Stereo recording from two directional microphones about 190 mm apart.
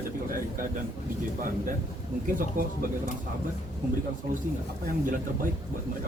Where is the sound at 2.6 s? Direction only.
45° right (ahead or behind).